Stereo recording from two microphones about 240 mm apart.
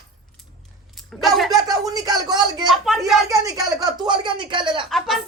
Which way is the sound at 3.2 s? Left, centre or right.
Centre.